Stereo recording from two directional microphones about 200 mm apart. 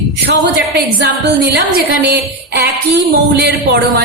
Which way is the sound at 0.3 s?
55° right (ahead or behind).